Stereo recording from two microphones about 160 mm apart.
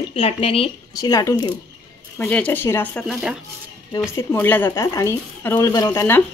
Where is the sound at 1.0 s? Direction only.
20° left (ahead or behind).